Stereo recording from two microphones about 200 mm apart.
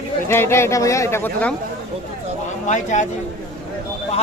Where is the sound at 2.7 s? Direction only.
35° left (ahead or behind).